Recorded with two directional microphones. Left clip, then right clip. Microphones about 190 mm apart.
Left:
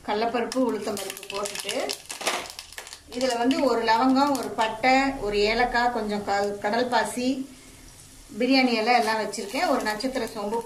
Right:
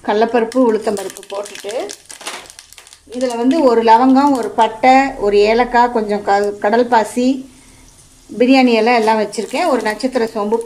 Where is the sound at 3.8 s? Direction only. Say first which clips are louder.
Right 11 dB; 45° right (ahead or behind).